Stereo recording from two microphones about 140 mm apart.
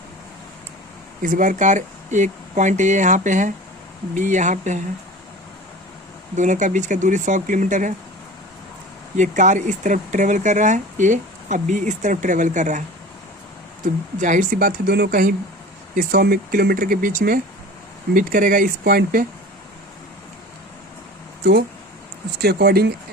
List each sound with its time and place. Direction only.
1.2 s speech: 75° right (ahead or behind)
6.3 s speech: 60° right (ahead or behind)
9.1 s speech: 60° right (ahead or behind)
13.8 s speech: 65° right (ahead or behind); by 19.2 s 85° right